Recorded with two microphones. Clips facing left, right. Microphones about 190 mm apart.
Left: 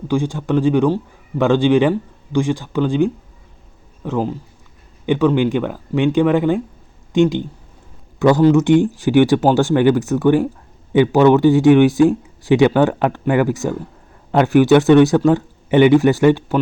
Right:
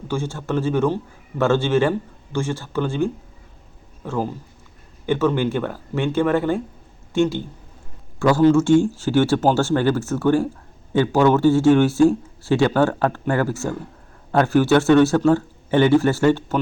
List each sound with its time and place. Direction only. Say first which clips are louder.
0.1 s speech: left 6 dB; 15° left (ahead or behind)